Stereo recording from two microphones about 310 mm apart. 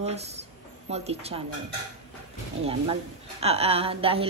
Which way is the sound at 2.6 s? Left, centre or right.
Centre.